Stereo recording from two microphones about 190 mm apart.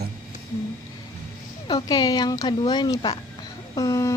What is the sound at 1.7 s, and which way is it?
Speech, 20° left (ahead or behind).